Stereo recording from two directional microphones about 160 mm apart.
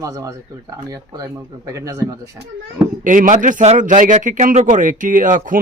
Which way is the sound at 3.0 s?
55° right (ahead or behind).